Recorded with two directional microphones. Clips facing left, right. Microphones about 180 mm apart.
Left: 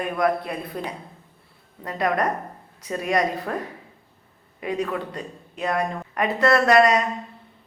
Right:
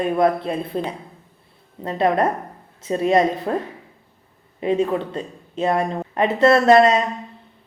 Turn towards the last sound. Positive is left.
turn(degrees=-25)  # may be behind; listen again after turning